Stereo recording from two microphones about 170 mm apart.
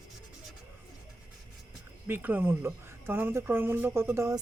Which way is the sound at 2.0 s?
10° right (ahead or behind).